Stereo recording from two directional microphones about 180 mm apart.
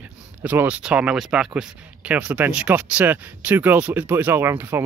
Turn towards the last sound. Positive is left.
turn(degrees=-10)  # may be behind; listen again after turning